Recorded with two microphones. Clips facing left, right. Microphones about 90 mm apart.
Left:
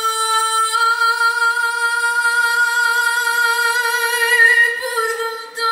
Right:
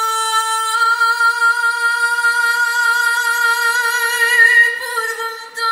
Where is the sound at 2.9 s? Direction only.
25° right (ahead or behind).